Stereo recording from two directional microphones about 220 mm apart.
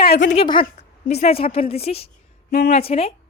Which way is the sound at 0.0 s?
50° left (ahead or behind).